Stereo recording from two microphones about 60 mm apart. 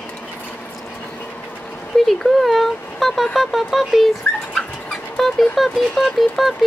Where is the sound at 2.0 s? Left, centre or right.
Centre.